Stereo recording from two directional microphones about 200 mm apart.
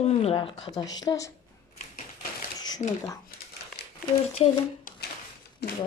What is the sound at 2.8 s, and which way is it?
Speech, 35° left (ahead or behind).